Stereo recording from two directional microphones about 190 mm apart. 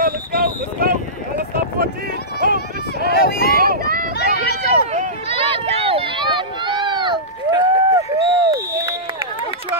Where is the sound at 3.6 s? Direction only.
50° right (ahead or behind).